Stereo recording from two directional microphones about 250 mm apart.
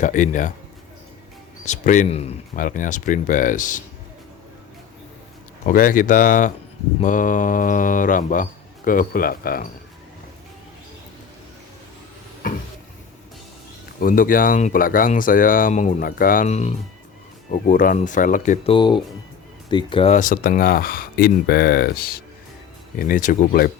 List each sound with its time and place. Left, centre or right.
0.0 s speech: left
1.6 s speech: left
5.6 s speech: left
12.4 s a sound: left
14.0 s speech: left